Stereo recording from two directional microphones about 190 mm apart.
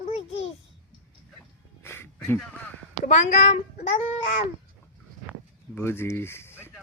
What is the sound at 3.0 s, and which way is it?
Speech, 35° left (ahead or behind).